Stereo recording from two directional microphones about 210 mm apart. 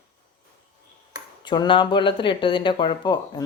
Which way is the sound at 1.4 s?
20° left (ahead or behind).